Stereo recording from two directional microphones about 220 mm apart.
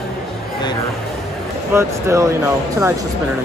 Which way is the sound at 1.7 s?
15° right (ahead or behind).